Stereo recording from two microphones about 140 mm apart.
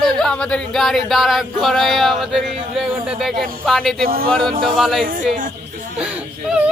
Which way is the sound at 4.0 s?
90° right.